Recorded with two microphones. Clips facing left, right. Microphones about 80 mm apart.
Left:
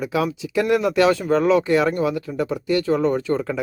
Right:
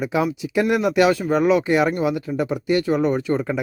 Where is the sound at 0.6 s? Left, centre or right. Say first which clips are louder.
Even; centre.